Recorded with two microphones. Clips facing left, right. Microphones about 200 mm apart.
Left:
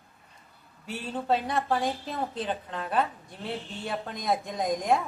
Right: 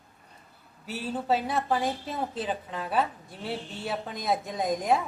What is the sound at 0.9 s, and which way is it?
A woman's voice, 5° right (ahead or behind).